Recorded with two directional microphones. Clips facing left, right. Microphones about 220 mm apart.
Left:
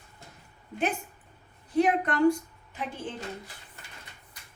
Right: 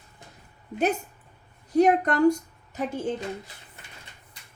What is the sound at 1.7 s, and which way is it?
A woman's voice, 40° right (ahead or behind).